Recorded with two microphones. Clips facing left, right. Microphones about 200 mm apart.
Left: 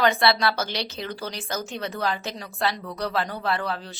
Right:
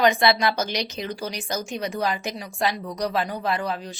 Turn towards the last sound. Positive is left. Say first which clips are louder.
# right 1 dB
turn(degrees=-15)  # may be behind; listen again after turning